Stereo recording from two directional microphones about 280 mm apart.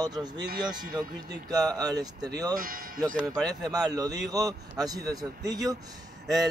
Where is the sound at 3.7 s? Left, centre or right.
Centre.